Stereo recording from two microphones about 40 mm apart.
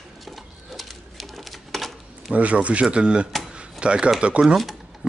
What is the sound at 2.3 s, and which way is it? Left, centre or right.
Speech, right.